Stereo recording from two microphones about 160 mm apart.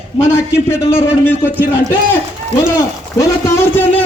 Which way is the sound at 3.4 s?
15° left (ahead or behind).